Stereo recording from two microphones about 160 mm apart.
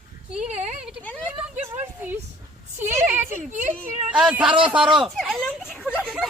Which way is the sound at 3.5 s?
50° right (ahead or behind).